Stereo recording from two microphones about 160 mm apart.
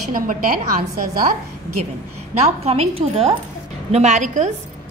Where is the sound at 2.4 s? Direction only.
40° right (ahead or behind).